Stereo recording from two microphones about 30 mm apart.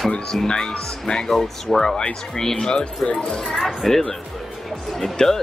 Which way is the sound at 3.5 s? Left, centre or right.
Centre.